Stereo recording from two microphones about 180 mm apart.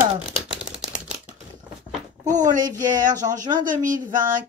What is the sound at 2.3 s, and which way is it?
Speech, 45° right (ahead or behind).